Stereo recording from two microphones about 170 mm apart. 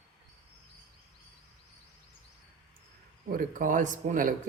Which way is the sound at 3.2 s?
55° right (ahead or behind).